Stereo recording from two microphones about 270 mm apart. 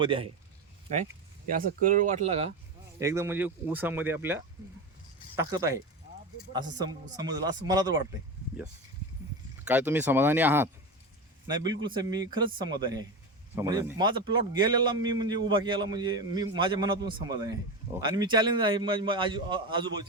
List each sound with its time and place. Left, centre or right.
0.0 s a man's voice: centre
1.5 s speech: right
3.0 s a man's voice: centre
9.6 s a man's voice: centre